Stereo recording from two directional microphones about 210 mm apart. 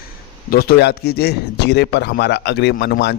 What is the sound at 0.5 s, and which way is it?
Speech, 45° left (ahead or behind).